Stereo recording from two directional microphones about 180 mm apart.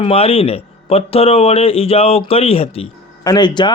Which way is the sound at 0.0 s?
35° left (ahead or behind).